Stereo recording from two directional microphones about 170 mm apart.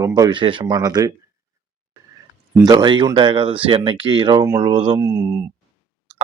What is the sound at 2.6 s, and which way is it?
Speech, 25° right (ahead or behind).